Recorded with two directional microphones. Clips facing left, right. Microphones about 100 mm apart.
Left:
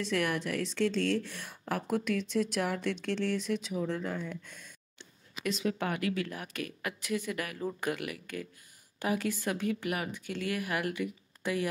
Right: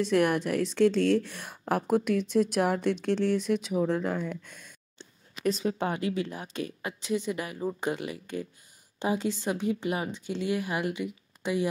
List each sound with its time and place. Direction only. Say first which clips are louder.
0.0 s a woman's voice: right 7 dB; 45° right (ahead or behind)
5.4 s a woman's voice: right 4 dB; 35° right (ahead or behind)